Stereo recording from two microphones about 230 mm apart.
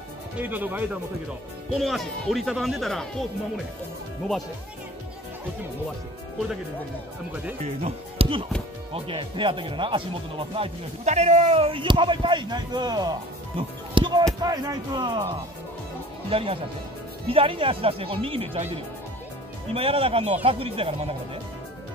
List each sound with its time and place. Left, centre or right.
0.4 s speech: centre
7.6 s speech: right
16.3 s speech: right
19.7 s speech: right